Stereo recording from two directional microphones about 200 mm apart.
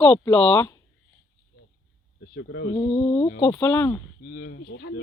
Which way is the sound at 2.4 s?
60° left (ahead or behind).